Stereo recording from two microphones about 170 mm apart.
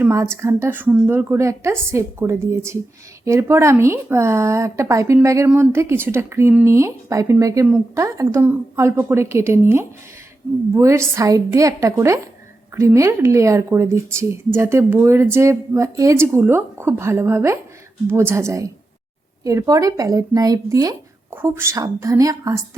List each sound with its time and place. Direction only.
0.0 s a woman's voice: 15° right (ahead or behind)